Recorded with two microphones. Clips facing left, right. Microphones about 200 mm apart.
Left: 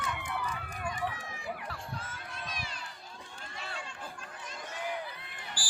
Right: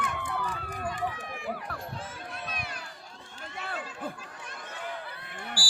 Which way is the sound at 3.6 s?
55° right (ahead or behind).